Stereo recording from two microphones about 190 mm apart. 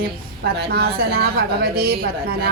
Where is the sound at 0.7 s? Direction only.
55° right (ahead or behind).